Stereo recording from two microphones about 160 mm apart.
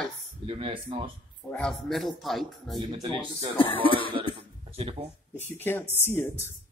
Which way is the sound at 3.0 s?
30° right (ahead or behind).